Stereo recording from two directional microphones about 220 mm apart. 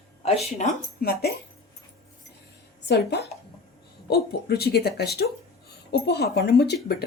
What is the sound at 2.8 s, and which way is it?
Speech, 50° left (ahead or behind).